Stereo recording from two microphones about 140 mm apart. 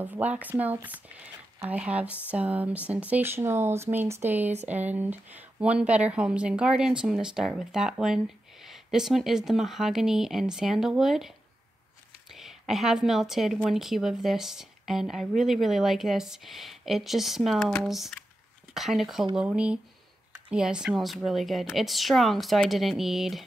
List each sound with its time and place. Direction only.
0.0 s speech: 10° right (ahead or behind)
12.4 s speech: centre (ahead or behind)